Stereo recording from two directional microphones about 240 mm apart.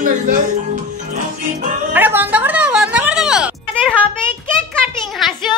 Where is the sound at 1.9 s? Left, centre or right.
Centre.